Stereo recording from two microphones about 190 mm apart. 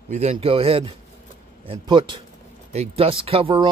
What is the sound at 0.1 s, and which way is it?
Speech, 35° right (ahead or behind).